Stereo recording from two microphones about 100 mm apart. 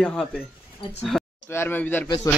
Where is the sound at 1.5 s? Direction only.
20° left (ahead or behind).